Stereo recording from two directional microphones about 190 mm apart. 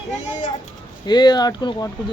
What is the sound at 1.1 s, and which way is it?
Speech, 20° left (ahead or behind).